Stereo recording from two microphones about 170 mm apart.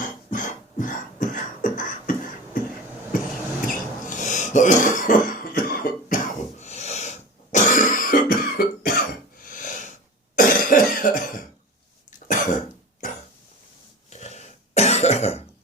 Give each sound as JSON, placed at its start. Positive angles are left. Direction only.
{"t": 0.0, "sound": "beatboxing", "side_deg": 50}
{"t": 3.7, "sound": "cough", "side_deg": 45}
{"t": 6.6, "sound": "cough", "side_deg": 40}
{"t": 14.1, "sound": "cough", "side_deg": 40}